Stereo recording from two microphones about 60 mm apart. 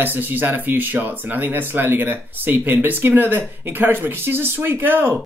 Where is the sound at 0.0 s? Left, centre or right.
Right.